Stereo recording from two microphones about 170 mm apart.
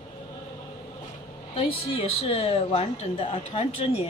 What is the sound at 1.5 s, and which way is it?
Speech, 35° left (ahead or behind).